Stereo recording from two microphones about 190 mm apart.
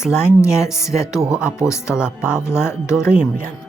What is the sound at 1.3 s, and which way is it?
Speech, 5° right (ahead or behind).